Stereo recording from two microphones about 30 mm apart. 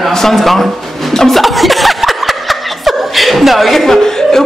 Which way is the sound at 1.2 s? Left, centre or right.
Centre.